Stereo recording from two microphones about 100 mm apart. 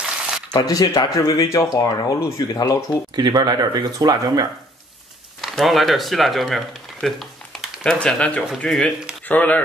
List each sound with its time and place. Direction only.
0.5 s speech: 45° left (ahead or behind)
3.2 s speech: 45° right (ahead or behind)
5.4 s speech: centre (ahead or behind); by 9.6 s 15° left (ahead or behind)